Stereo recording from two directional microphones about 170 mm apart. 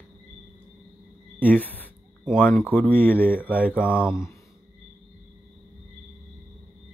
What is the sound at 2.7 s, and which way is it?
Speech, 10° left (ahead or behind).